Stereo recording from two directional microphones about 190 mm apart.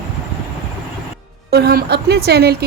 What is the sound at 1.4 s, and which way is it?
A woman's voice, 55° right (ahead or behind).